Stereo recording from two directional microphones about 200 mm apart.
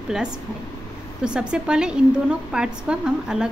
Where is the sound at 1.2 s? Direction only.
5° right (ahead or behind).